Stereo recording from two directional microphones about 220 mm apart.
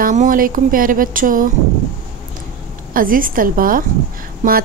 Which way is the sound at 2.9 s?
40° right (ahead or behind).